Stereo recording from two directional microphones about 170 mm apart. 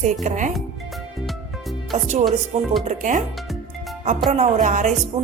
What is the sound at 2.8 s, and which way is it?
Music, 45° right (ahead or behind).